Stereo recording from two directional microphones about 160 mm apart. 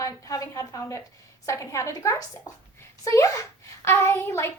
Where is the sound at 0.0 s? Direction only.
20° left (ahead or behind).